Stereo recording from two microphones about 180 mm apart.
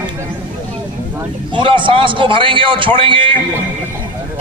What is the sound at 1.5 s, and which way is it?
A man's voice, 25° right (ahead or behind).